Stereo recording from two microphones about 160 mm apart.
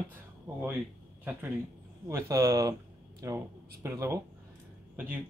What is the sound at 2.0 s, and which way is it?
Speech, 20° right (ahead or behind).